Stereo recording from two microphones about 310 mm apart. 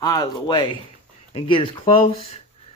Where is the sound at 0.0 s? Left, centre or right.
Centre.